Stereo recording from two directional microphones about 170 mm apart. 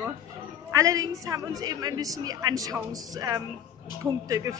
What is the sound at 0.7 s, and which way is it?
A woman's voice, 20° right (ahead or behind).